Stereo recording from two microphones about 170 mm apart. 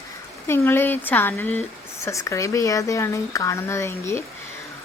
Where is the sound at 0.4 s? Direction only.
15° left (ahead or behind).